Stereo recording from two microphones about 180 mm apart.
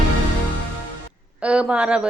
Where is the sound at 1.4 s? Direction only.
5° right (ahead or behind).